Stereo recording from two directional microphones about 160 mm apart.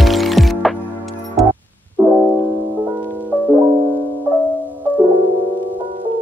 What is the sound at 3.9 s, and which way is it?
Music, 10° left (ahead or behind).